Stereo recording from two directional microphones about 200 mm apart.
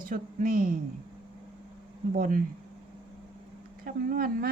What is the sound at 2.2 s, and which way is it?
Speech, 40° right (ahead or behind).